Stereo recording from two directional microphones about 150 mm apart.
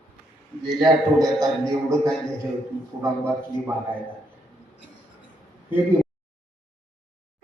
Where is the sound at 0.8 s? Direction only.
25° right (ahead or behind).